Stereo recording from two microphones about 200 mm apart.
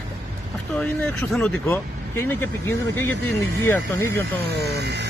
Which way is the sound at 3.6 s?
10° left (ahead or behind).